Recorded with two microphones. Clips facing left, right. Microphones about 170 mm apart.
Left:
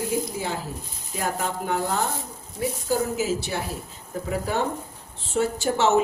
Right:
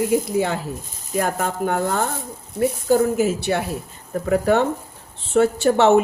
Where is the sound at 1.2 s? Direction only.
55° right (ahead or behind).